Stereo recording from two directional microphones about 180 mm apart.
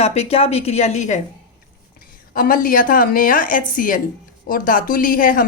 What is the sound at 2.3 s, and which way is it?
A woman's voice, 50° left (ahead or behind).